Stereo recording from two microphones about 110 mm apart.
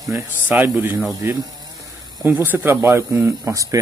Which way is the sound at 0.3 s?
15° right (ahead or behind).